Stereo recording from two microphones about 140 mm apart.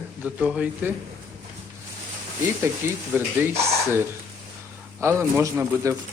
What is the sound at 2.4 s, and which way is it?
Speech, 20° right (ahead or behind).